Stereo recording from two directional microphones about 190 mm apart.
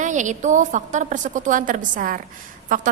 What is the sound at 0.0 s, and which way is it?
A woman's voice, 40° right (ahead or behind).